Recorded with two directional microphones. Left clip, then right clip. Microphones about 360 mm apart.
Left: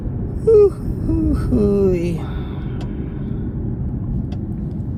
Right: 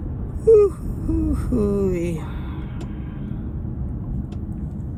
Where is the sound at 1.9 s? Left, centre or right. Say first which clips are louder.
Left 4 dB; left.